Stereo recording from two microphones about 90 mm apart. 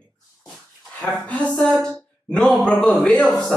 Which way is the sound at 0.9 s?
15° left (ahead or behind).